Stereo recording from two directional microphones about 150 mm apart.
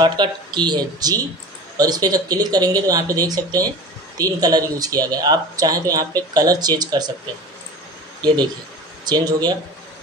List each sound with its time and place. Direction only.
0.0 s speech: 30° right (ahead or behind)
9.0 s speech: 30° right (ahead or behind)